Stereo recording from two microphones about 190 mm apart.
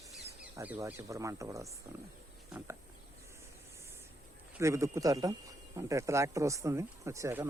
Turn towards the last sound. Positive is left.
turn(degrees=-15)  # may be behind; listen again after turning